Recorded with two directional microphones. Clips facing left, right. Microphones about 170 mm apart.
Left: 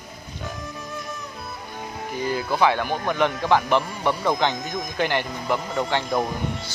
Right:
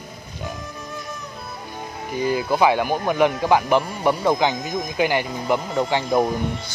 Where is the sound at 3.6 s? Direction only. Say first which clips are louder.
Right 3 dB; centre (ahead or behind).